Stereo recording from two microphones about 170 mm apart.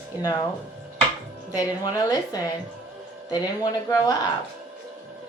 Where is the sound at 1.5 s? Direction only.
20° left (ahead or behind).